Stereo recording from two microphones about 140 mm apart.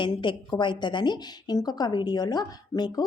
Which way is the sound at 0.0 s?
35° left (ahead or behind).